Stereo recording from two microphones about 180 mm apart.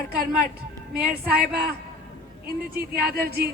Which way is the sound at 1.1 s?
55° right (ahead or behind).